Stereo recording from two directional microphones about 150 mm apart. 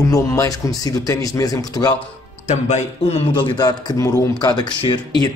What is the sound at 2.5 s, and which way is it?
Speech, 50° left (ahead or behind).